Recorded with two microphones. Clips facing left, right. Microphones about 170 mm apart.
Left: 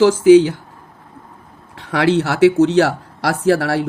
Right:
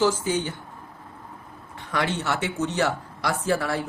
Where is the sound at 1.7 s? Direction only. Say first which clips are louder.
Left 11 dB; 75° left (ahead or behind).